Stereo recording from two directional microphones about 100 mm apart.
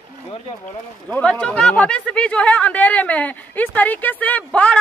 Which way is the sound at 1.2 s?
10° left (ahead or behind).